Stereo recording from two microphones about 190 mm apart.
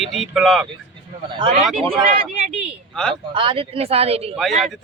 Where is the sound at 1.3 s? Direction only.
30° right (ahead or behind).